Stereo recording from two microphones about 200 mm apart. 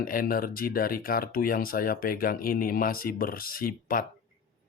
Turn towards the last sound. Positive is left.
turn(degrees=45)  # may be behind; listen again after turning